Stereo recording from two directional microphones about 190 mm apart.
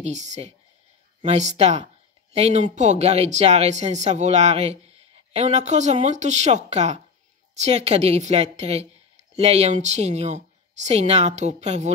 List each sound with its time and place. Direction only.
0.0 s speech: 40° right (ahead or behind)